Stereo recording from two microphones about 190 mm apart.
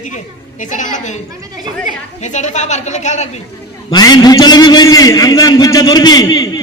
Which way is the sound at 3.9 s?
20° left (ahead or behind).